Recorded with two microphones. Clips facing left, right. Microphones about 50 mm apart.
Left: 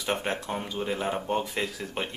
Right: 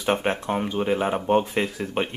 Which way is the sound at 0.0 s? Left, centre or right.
Right.